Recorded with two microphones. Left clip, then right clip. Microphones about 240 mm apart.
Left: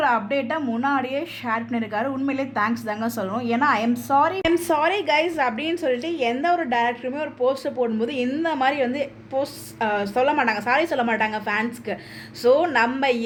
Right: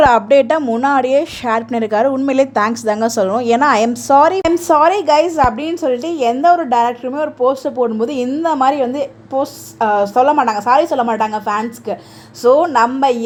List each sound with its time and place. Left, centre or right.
0.0 s a woman's voice: right